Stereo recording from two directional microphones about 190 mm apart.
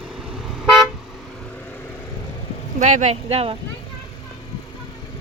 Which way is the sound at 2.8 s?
40° right (ahead or behind).